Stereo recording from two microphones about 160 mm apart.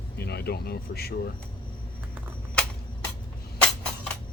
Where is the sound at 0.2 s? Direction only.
85° left.